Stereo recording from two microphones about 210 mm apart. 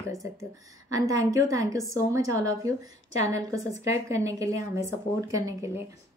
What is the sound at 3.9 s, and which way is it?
A woman's voice, 15° right (ahead or behind).